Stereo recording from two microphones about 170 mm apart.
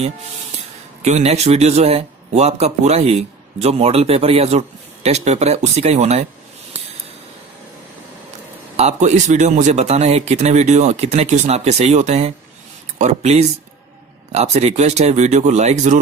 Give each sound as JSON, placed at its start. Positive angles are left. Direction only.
{"t": 1.0, "sound": "a man's voice", "side_deg": -40}
{"t": 8.7, "sound": "a man's voice", "side_deg": -40}